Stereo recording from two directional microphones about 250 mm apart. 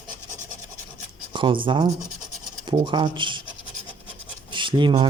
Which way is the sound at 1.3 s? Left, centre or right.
Centre.